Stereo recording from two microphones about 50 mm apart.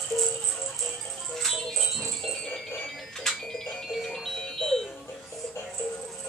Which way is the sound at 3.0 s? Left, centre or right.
Centre.